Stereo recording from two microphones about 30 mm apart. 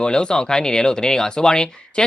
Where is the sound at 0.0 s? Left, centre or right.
Left.